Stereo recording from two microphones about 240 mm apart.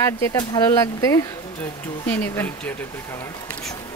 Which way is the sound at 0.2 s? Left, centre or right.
Centre.